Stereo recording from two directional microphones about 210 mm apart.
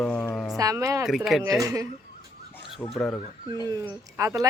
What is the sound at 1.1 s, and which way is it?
Speech, centre (ahead or behind).